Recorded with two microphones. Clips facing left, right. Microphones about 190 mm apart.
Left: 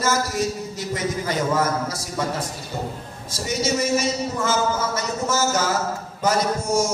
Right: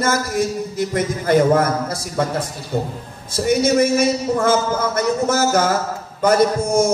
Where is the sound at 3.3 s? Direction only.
55° right (ahead or behind).